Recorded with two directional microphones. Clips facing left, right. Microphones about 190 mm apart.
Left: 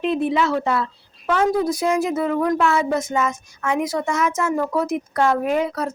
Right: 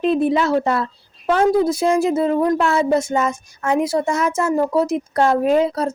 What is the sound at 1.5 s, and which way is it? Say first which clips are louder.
Speech: right 3 dB; 25° right (ahead or behind).